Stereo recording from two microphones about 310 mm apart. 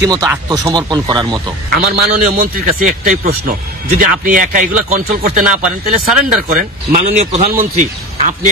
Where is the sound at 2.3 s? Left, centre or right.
Right.